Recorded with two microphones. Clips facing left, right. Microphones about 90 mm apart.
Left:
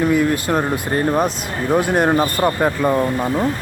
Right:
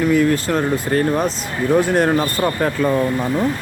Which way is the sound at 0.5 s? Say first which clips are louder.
Right 1 dB; 20° left (ahead or behind).